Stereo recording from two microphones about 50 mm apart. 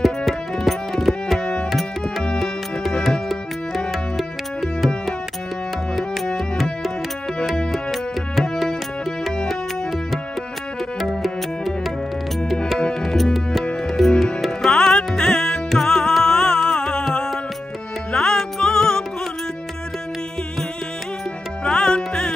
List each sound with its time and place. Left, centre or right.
0.0 s music: centre
1.4 s tabla: centre
1.7 s music: centre
6.2 s tabla: centre
7.7 s music: centre
11.0 s music: centre
21.6 s music: centre